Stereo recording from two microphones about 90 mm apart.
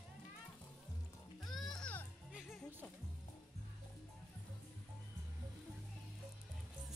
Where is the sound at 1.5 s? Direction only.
5° left (ahead or behind).